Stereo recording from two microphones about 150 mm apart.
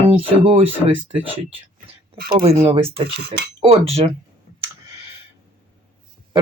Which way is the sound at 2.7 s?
40° right (ahead or behind).